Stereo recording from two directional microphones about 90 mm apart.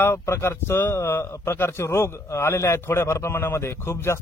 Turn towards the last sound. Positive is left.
turn(degrees=30)  # may be behind; listen again after turning